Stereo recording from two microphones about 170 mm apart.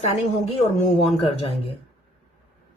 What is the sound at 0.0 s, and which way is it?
Speech, 40° left (ahead or behind).